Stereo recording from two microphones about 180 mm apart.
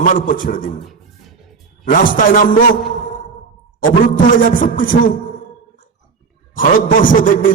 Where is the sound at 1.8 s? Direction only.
50° left (ahead or behind).